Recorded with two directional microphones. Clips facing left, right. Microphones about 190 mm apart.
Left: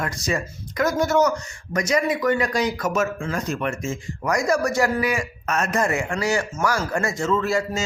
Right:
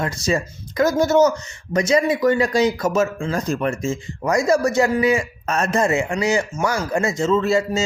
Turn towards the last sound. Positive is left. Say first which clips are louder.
# right 4 dB
turn(degrees=-25)  # may be behind; listen again after turning